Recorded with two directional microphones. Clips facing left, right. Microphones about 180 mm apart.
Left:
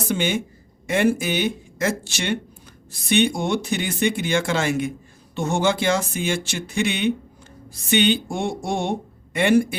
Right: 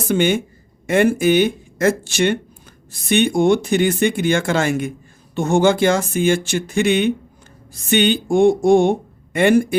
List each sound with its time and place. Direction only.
0.1 s speech: 55° right (ahead or behind)